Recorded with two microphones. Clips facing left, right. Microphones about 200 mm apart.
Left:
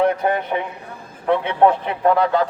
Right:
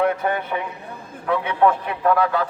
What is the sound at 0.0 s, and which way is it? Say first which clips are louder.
A man's voice: left 3 dB; 30° left (ahead or behind).